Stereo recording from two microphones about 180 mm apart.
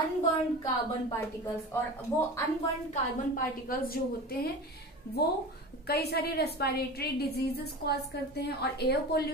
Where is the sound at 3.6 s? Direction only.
55° left (ahead or behind).